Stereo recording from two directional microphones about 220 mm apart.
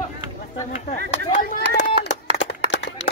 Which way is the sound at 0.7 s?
30° left (ahead or behind).